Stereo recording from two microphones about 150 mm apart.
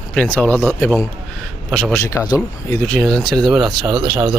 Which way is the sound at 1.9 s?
20° left (ahead or behind).